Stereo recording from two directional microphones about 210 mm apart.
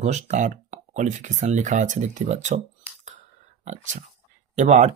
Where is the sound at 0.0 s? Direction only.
35° right (ahead or behind).